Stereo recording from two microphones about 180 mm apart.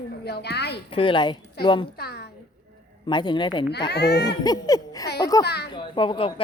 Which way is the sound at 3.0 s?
25° left (ahead or behind).